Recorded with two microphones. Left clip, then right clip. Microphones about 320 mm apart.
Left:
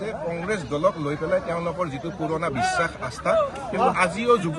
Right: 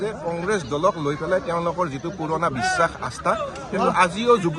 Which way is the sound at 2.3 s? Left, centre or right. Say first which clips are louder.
Right 4 dB; centre.